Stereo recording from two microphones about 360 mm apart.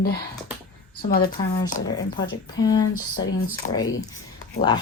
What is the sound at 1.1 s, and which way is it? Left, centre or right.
Speech, left.